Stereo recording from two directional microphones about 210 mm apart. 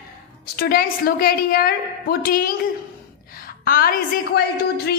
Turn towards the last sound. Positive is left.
turn(degrees=50)  # may be behind; listen again after turning